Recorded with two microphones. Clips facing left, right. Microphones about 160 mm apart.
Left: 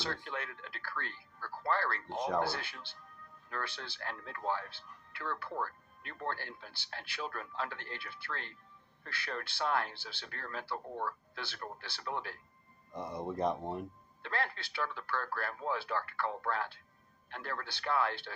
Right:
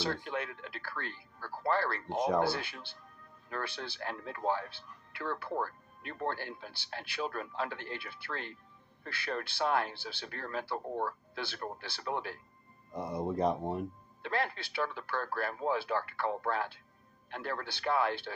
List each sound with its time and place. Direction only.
0.0 s speech: 15° right (ahead or behind)
12.9 s speech: 5° right (ahead or behind)